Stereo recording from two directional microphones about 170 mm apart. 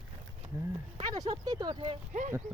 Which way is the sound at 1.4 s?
25° right (ahead or behind).